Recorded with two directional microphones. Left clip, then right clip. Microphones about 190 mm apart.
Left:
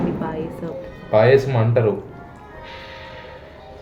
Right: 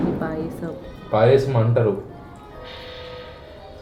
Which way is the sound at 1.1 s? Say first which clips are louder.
Left 2 dB; 20° left (ahead or behind).